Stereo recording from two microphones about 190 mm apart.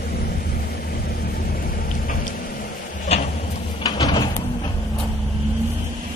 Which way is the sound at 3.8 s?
20° left (ahead or behind).